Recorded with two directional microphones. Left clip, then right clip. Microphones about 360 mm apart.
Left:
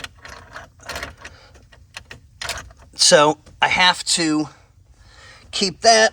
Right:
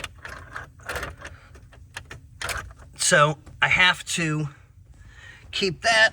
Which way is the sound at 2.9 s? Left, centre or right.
Centre.